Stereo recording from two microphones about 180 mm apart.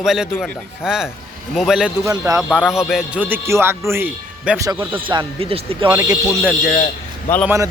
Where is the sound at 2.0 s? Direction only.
15° right (ahead or behind).